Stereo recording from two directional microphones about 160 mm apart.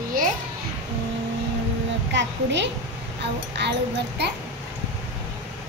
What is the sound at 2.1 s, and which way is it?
Speech, 90° right.